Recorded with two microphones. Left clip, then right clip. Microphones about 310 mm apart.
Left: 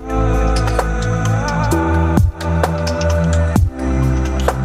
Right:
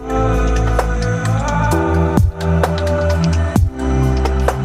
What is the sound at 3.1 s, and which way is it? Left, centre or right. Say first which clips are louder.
Music: left 1 dB; centre.